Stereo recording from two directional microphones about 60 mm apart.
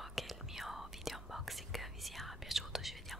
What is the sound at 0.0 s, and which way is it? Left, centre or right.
Whispering, centre.